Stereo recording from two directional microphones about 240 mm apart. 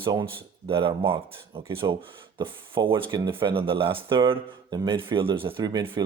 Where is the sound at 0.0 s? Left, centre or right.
Centre.